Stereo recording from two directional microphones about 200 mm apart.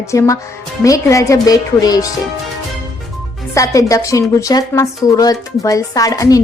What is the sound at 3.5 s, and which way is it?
A woman's voice, 15° left (ahead or behind).